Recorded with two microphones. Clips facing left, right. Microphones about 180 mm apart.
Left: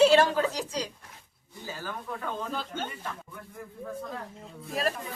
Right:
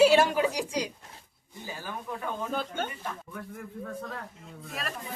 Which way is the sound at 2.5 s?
55° right (ahead or behind).